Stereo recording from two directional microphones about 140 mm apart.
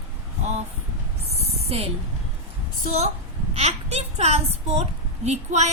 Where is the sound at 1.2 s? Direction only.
45° right (ahead or behind).